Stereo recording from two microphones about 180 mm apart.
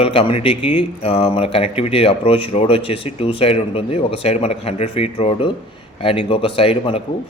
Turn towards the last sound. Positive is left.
turn(degrees=30)  # may be behind; listen again after turning